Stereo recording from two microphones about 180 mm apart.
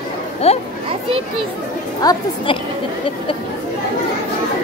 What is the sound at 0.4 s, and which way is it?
Speech, 35° left (ahead or behind).